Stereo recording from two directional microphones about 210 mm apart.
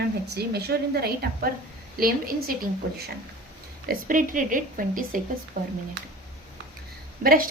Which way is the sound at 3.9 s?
40° right (ahead or behind).